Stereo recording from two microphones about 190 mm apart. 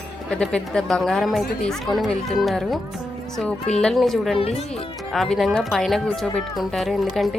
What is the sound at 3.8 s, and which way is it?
Speech, centre (ahead or behind).